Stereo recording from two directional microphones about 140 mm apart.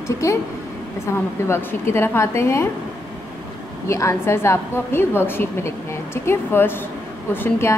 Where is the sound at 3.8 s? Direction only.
20° left (ahead or behind).